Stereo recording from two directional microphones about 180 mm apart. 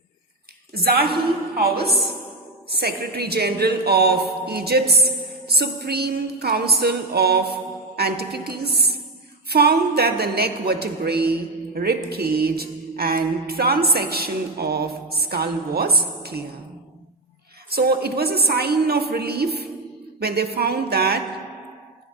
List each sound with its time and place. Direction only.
0.7 s a woman's voice: 60° right (ahead or behind)
17.7 s a woman's voice: 60° right (ahead or behind)